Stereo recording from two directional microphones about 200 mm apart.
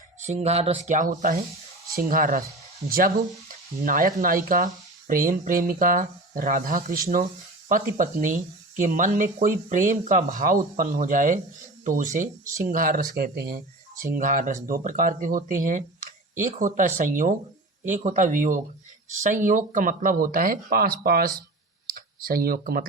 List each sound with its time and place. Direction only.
0.2 s speech: 35° right (ahead or behind)